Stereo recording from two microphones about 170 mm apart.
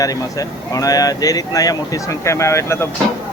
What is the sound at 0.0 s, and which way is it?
Speech, 20° left (ahead or behind).